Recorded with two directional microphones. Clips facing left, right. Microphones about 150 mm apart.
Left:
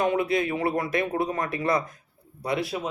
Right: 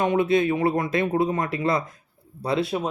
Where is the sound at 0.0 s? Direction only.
25° right (ahead or behind).